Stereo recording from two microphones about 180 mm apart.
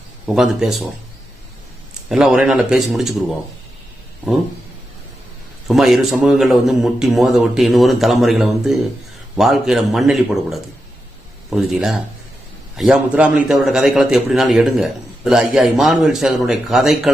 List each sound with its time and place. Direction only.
0.3 s a man's voice: centre (ahead or behind)
2.0 s a man's voice: 5° right (ahead or behind)
5.6 s a man's voice: centre (ahead or behind)